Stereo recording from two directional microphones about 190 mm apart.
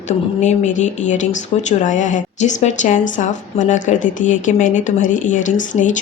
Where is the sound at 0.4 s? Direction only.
40° left (ahead or behind).